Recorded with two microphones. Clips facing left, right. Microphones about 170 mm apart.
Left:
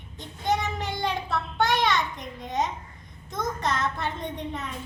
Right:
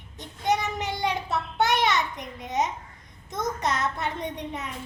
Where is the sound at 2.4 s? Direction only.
20° right (ahead or behind).